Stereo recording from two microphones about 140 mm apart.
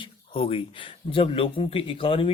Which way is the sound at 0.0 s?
40° left (ahead or behind).